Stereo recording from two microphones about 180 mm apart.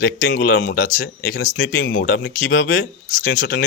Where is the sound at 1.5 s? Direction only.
90° left.